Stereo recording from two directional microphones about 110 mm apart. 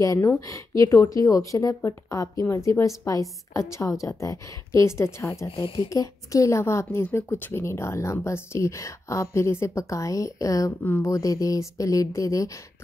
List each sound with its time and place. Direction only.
0.0 s a woman's voice: 30° left (ahead or behind)